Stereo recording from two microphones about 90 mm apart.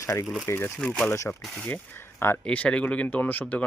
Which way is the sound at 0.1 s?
10° left (ahead or behind).